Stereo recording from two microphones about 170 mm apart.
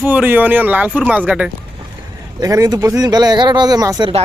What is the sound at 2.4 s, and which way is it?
Speech, 20° right (ahead or behind).